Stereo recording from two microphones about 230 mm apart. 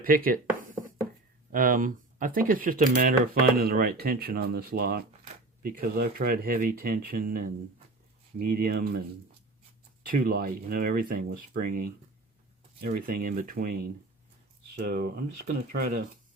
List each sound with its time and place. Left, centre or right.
0.0 s speech: right
1.5 s speech: right
10.1 s speech: right